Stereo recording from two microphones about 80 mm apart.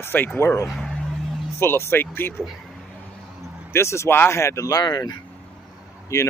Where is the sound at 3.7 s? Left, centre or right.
Left.